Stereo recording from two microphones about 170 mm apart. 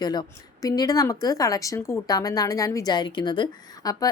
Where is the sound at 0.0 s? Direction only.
25° left (ahead or behind).